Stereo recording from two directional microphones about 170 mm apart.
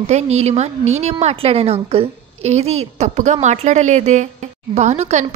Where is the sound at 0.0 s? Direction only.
40° right (ahead or behind).